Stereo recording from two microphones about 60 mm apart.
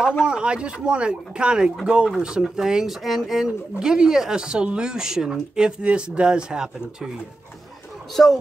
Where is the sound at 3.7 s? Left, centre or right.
Centre.